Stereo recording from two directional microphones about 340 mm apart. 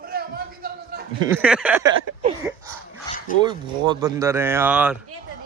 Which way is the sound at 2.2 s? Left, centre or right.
Centre.